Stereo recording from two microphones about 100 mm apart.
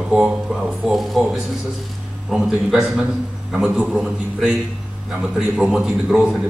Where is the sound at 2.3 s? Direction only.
5° right (ahead or behind).